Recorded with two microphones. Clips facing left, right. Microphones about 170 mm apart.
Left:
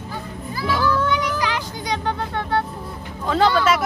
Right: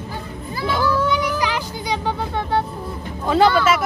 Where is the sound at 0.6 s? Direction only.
25° right (ahead or behind).